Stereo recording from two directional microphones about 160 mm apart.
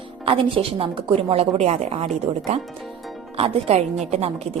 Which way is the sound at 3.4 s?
35° right (ahead or behind).